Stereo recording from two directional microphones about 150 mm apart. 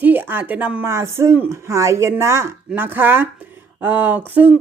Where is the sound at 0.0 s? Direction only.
10° right (ahead or behind).